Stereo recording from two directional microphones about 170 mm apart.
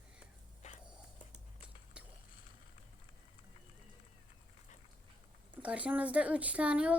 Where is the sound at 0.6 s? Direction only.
40° left (ahead or behind).